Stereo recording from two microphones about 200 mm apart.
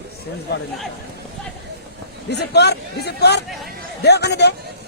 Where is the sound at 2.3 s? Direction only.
55° left (ahead or behind).